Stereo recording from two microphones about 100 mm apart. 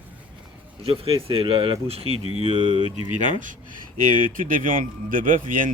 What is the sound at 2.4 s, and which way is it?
Speech, 90° right.